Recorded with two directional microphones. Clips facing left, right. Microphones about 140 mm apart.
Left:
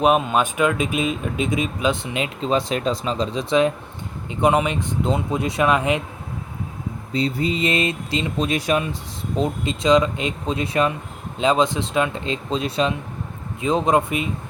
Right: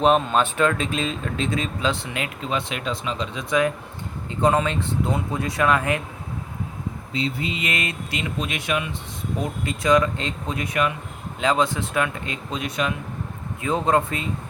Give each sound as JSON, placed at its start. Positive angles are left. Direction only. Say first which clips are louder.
{"t": 0.0, "sound": "speech", "louder": "left 1 dB", "side_deg": 10}
{"t": 2.5, "sound": "speech", "louder": "left 7 dB", "side_deg": 35}
{"t": 4.3, "sound": "speech", "louder": "left 2 dB", "side_deg": 15}
{"t": 7.1, "sound": "speech", "louder": "left 5 dB", "side_deg": 40}
{"t": 9.4, "sound": "speech", "louder": "left 5 dB", "side_deg": 20}
{"t": 13.6, "sound": "speech", "louder": "left 2 dB", "side_deg": 20}